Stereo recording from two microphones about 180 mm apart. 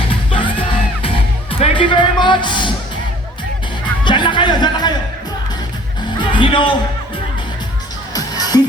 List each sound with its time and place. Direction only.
0.3 s music: 30° left (ahead or behind)
4.0 s music: 25° left (ahead or behind)
6.1 s music: 30° left (ahead or behind)
8.1 s music: 20° left (ahead or behind)